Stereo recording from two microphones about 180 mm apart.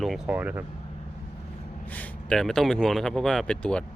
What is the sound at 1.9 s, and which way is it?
Speech, 5° left (ahead or behind).